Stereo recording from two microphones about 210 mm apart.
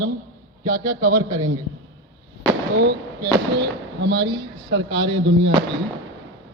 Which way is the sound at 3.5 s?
50° right (ahead or behind).